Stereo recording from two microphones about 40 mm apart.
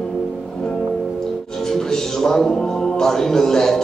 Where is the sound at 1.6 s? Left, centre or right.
Centre.